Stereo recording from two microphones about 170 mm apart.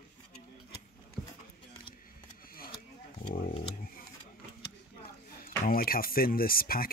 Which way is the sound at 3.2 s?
55° left (ahead or behind).